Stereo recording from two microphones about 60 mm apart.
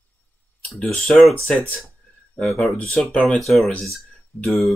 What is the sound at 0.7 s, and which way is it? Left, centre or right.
Speech, centre.